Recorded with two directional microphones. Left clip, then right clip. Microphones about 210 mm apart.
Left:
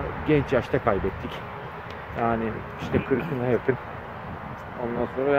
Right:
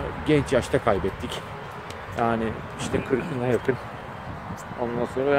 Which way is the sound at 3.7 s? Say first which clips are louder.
Even; 15° right (ahead or behind).